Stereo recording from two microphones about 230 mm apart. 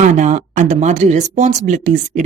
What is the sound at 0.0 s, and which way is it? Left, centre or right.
Speech, right.